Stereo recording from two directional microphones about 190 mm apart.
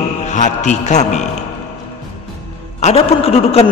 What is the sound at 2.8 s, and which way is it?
Speech, 35° left (ahead or behind).